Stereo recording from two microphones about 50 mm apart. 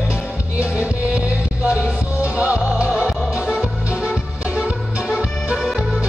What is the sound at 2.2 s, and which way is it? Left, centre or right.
Music, right.